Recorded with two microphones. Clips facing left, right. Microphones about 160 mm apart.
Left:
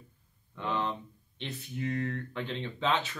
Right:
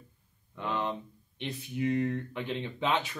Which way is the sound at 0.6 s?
15° right (ahead or behind).